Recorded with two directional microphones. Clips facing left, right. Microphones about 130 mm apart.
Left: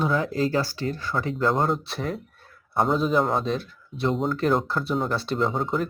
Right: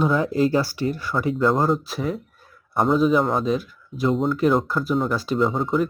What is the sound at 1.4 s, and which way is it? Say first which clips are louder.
Speech: right 3 dB; centre (ahead or behind).